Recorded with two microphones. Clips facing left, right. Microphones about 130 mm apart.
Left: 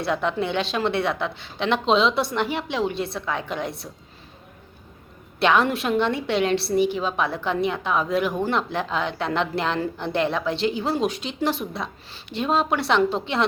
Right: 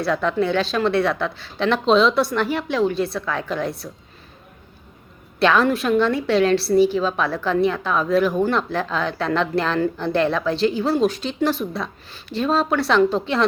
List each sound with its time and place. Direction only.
0.0 s a woman's voice: 20° left (ahead or behind)
5.4 s a woman's voice: 20° left (ahead or behind)